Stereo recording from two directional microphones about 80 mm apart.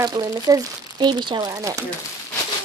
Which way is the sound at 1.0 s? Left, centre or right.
Right.